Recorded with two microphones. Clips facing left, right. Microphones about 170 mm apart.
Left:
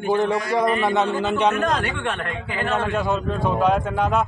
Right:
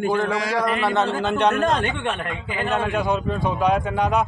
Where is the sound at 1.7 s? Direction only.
20° right (ahead or behind).